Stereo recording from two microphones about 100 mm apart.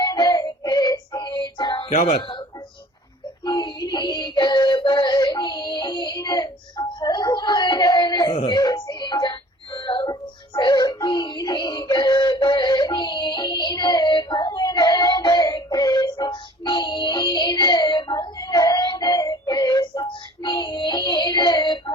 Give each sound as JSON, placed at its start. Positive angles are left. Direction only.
{"t": 0.0, "sound": "music", "side_deg": 45}
{"t": 2.0, "sound": "speech", "side_deg": 65}
{"t": 3.4, "sound": "synthetic singing", "side_deg": 50}
{"t": 8.4, "sound": "music", "side_deg": 50}